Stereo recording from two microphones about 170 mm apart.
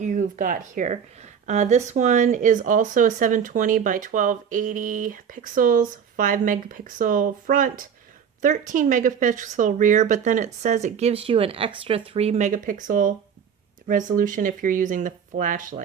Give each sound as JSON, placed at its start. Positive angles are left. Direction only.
{"t": 0.0, "sound": "speech", "side_deg": -50}